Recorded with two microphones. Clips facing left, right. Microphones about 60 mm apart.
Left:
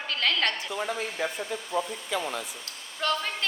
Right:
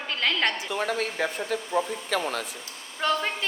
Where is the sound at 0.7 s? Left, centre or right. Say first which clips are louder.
Right 3 dB; right.